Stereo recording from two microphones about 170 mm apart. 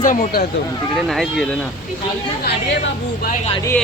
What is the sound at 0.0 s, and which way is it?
Speech, 50° left (ahead or behind).